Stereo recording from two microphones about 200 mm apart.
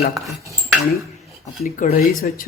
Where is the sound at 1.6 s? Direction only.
45° left (ahead or behind).